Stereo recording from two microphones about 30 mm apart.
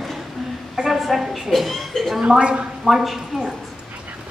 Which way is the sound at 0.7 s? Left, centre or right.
Centre.